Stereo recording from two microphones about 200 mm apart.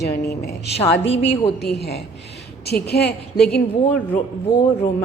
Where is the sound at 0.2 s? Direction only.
50° left (ahead or behind).